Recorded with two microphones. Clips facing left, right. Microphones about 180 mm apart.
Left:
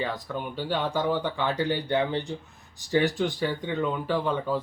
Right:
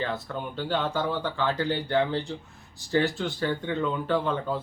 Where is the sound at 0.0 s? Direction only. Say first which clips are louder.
Even; 10° left (ahead or behind).